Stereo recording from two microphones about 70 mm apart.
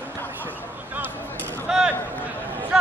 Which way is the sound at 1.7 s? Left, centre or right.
Centre.